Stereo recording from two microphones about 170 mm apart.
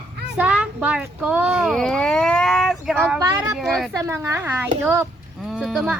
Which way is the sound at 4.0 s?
15° right (ahead or behind).